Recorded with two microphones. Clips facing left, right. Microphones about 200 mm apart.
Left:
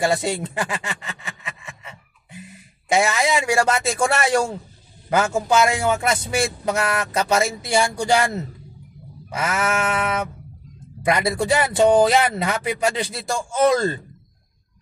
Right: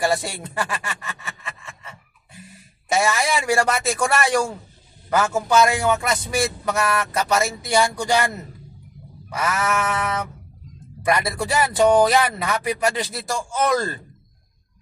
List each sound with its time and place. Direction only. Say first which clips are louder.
0.0 s a sound: left 2 dB; 20° left (ahead or behind)
5.2 s speech: right 1 dB; 25° left (ahead or behind)
9.3 s speech: left 1 dB; 25° left (ahead or behind)
11.0 s speech: left 2 dB; 25° left (ahead or behind)